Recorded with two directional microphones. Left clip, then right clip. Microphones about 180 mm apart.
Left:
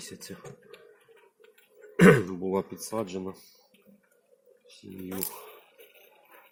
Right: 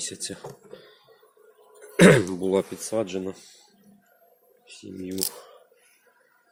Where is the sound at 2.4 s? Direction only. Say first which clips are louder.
Right 6 dB; 40° right (ahead or behind).